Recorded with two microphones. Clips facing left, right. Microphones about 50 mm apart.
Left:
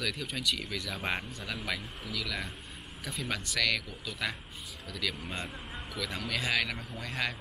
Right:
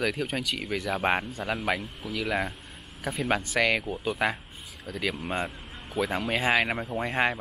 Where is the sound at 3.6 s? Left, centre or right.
Right.